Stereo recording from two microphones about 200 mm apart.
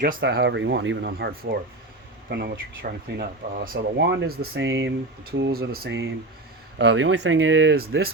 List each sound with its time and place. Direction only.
0.2 s speech: 55° right (ahead or behind)
6.7 s speech: 60° right (ahead or behind)
7.8 s speech: 50° right (ahead or behind)